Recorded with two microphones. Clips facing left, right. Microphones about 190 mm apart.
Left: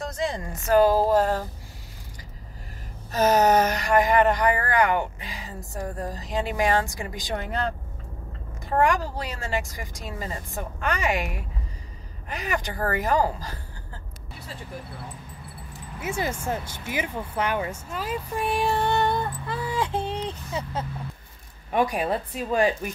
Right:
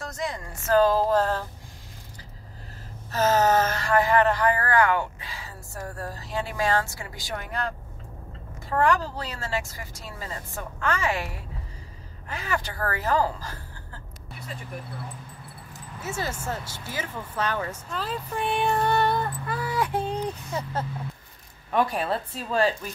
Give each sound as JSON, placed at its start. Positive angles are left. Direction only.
{"t": 0.0, "sound": "speech", "side_deg": 20}
{"t": 3.1, "sound": "speech", "side_deg": 15}
{"t": 16.0, "sound": "speech", "side_deg": 15}
{"t": 18.7, "sound": "female singing", "side_deg": 20}
{"t": 20.1, "sound": "speech", "side_deg": 20}
{"t": 21.7, "sound": "speech", "side_deg": 15}